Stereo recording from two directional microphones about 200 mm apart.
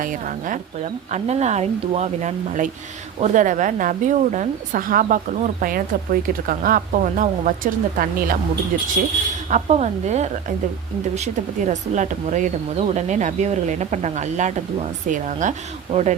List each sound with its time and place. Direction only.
0.0 s speech: 40° right (ahead or behind)